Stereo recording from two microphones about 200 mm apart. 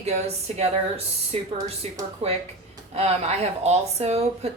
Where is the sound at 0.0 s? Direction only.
35° right (ahead or behind).